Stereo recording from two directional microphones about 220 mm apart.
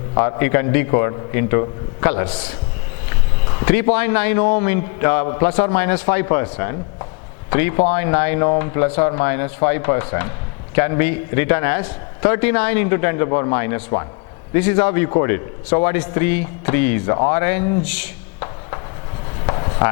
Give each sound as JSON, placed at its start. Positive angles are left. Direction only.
{"t": 0.1, "sound": "a man's voice", "side_deg": 20}
{"t": 3.7, "sound": "a man's voice", "side_deg": 10}
{"t": 19.5, "sound": "chopping", "side_deg": 20}